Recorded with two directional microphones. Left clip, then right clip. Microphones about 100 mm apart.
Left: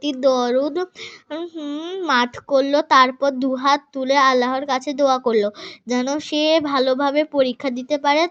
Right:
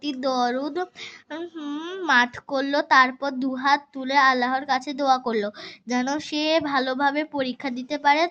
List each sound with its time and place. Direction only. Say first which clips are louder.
0.0 s a child's voice: left 6 dB; 25° left (ahead or behind)
1.3 s a woman's voice: left 5 dB; 10° left (ahead or behind)
2.0 s speech: left 1 dB; 30° left (ahead or behind)
2.5 s a child's voice: left 9 dB; 20° left (ahead or behind)